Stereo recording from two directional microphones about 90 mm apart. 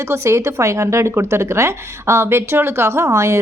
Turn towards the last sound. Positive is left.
turn(degrees=-30)  # may be behind; listen again after turning